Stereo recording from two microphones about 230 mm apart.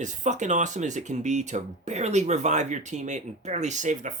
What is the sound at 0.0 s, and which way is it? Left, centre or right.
Speech, right.